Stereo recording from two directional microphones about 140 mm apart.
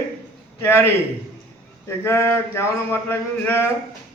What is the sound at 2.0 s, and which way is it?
Speech, 20° left (ahead or behind).